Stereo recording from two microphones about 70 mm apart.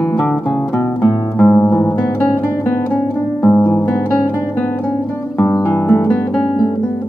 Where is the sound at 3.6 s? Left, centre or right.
Left.